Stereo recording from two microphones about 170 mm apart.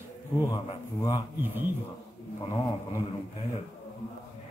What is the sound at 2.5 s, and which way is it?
Speech, 20° left (ahead or behind).